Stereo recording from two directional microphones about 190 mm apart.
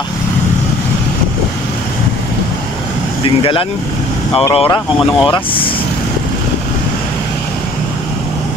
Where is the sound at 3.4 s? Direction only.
30° left (ahead or behind).